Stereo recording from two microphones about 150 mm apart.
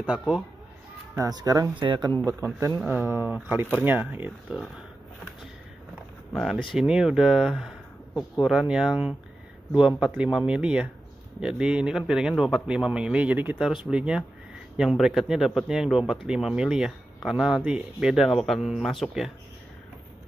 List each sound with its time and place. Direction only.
1.1 s speech: 25° right (ahead or behind)
2.9 s speech: 15° right (ahead or behind)
6.3 s speech: centre (ahead or behind)